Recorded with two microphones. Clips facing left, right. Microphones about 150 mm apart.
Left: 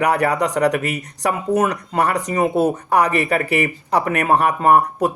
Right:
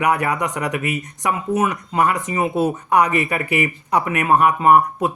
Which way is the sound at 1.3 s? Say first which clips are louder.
Left 2 dB; 45° left (ahead or behind).